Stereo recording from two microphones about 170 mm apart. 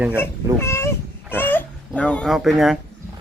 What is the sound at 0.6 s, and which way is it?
Dog, 15° left (ahead or behind).